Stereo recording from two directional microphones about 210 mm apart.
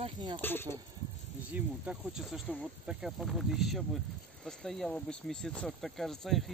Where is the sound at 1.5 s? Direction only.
5° right (ahead or behind).